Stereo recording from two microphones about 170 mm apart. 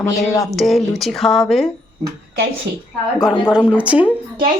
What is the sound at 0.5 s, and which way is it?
Speech, centre (ahead or behind).